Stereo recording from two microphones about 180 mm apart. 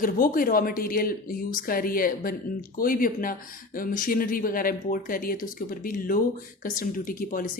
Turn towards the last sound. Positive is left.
turn(degrees=50)  # may be behind; listen again after turning